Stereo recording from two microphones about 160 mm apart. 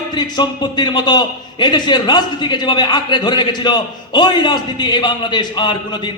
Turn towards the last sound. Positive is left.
turn(degrees=30)  # may be behind; listen again after turning